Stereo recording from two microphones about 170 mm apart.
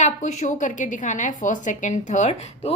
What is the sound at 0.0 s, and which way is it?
A woman's voice, 45° left (ahead or behind).